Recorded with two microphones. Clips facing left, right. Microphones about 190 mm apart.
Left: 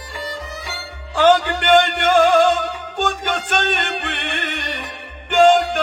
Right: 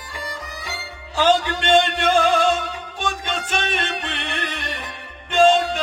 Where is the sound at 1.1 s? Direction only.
55° left (ahead or behind).